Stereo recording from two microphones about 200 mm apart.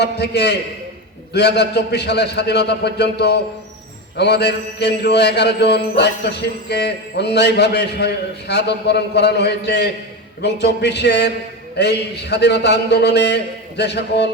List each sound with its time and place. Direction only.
0.0 s a man's voice: 55° left (ahead or behind)